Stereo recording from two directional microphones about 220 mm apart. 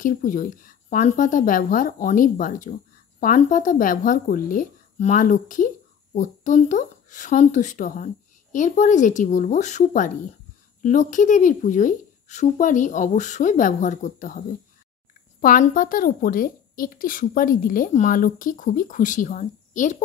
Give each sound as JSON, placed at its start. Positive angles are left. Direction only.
{"t": 0.0, "sound": "a woman's voice", "side_deg": 40}
{"t": 15.4, "sound": "a woman's voice", "side_deg": 40}